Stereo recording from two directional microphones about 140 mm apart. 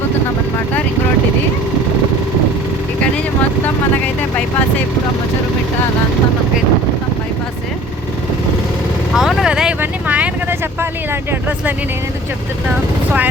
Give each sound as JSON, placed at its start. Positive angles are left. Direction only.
{"t": 9.1, "sound": "vehicle", "side_deg": -5}
{"t": 10.8, "sound": "speech", "side_deg": -15}